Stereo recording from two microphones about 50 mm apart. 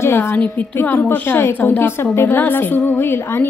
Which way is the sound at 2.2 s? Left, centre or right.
Left.